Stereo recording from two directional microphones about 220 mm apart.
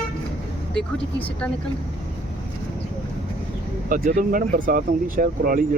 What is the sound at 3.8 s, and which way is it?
Speech, 40° right (ahead or behind).